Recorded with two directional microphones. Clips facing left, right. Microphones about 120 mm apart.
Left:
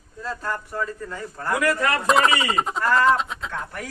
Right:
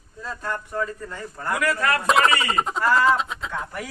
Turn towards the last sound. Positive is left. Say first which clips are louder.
# right 1 dB
turn(degrees=-5)  # may be behind; listen again after turning